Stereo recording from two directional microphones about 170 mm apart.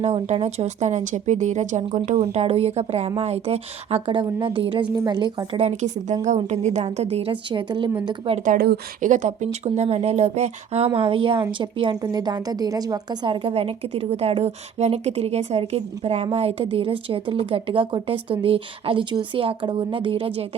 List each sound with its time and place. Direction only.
0.0 s speech: 40° right (ahead or behind)
8.4 s speech: 65° right (ahead or behind)
9.0 s speech: 45° right (ahead or behind)